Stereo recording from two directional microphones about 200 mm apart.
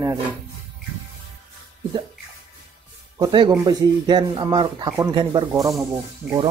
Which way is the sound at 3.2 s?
20° right (ahead or behind).